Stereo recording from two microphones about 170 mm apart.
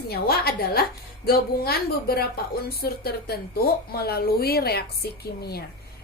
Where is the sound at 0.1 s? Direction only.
65° left (ahead or behind).